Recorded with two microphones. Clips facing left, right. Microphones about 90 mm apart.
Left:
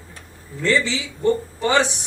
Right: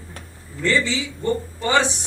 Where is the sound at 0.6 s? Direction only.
20° left (ahead or behind).